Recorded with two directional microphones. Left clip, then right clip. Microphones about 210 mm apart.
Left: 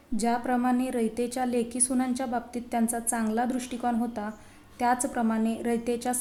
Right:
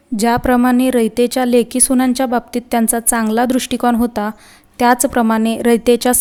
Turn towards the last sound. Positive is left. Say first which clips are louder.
# right 16 dB
turn(degrees=-40)  # may be behind; listen again after turning